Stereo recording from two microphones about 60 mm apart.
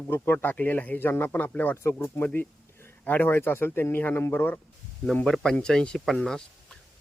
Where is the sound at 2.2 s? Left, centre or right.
Left.